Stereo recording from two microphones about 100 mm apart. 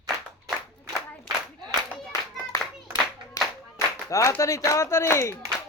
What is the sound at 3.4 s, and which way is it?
Clapping, 35° left (ahead or behind).